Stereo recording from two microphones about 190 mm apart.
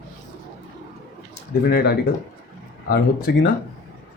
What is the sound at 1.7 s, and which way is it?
Speech, 55° left (ahead or behind).